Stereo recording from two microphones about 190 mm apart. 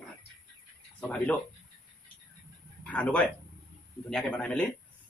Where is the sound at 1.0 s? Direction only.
10° left (ahead or behind).